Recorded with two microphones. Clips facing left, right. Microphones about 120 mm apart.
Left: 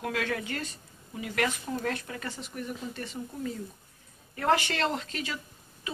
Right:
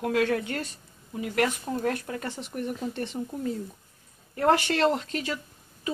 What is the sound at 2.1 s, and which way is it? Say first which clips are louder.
Speech: right 4 dB; 35° right (ahead or behind).